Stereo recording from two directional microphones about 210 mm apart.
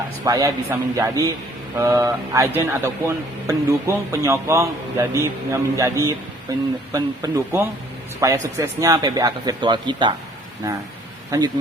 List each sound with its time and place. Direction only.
0.3 s a man's voice: 15° right (ahead or behind)